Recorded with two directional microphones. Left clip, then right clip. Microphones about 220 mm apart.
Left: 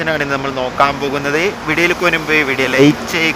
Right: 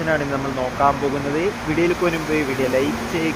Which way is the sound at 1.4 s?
50° left (ahead or behind).